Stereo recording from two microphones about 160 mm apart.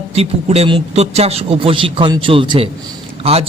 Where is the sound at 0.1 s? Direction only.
40° right (ahead or behind).